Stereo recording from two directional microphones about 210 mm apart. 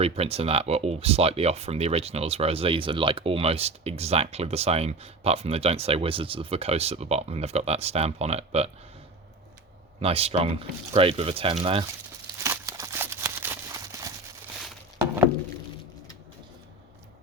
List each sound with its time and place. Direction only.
0.0 s speech: 30° right (ahead or behind)
10.0 s speech: 30° right (ahead or behind)
12.4 s a sound: 15° right (ahead or behind)